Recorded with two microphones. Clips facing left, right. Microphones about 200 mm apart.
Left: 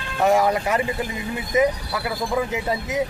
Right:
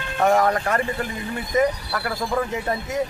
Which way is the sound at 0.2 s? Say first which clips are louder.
Even; 5° left (ahead or behind).